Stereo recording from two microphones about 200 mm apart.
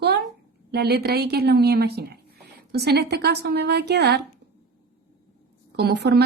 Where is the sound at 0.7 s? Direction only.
55° right (ahead or behind).